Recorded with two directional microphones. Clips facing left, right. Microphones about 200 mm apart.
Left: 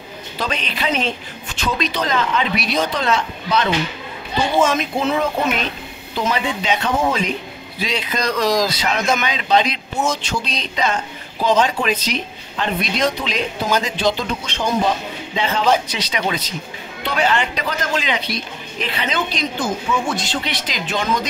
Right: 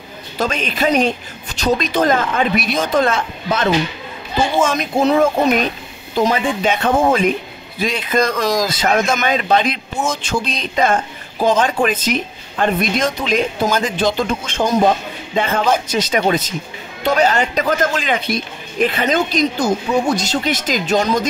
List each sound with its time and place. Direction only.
0.4 s a man's voice: 45° right (ahead or behind)
4.7 s a man's voice: 40° right (ahead or behind)